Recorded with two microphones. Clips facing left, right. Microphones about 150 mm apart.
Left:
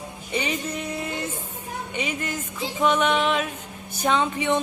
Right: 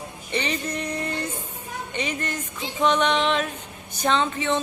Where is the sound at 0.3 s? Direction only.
10° left (ahead or behind).